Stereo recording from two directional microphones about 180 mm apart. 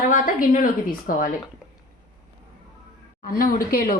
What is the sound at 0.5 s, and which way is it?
Speech, 50° left (ahead or behind).